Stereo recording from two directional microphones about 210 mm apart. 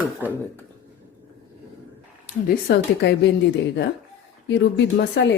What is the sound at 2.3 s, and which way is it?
Speech, 45° left (ahead or behind).